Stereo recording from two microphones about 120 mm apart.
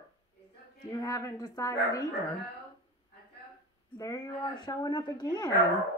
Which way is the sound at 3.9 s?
30° left (ahead or behind).